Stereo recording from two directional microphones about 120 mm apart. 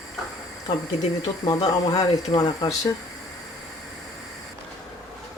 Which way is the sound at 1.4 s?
35° left (ahead or behind).